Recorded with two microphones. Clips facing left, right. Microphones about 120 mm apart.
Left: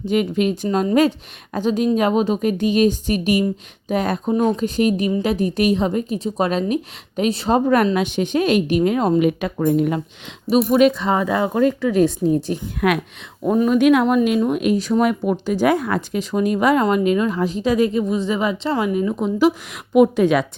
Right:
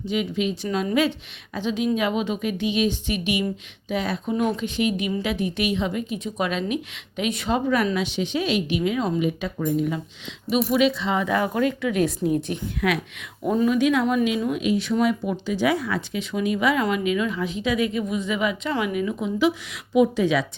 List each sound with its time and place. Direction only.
0.0 s speech: 50° left (ahead or behind)
4.4 s a woman's voice: 35° left (ahead or behind)
7.9 s speech: 50° left (ahead or behind)
10.5 s speech: 45° left (ahead or behind)
11.3 s a woman's voice: 30° left (ahead or behind)
12.8 s speech: 50° left (ahead or behind)
13.4 s speech: 20° left (ahead or behind)
13.7 s speech: 60° left (ahead or behind)